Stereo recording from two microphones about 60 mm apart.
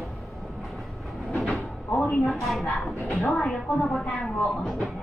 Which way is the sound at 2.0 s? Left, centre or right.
Left.